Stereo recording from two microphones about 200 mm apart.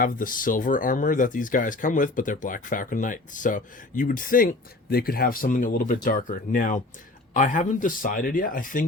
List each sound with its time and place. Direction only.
0.0 s speech: 45° left (ahead or behind)